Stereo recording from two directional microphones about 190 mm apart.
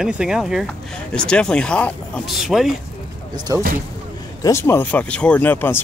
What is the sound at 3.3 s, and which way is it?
Speech, 20° right (ahead or behind).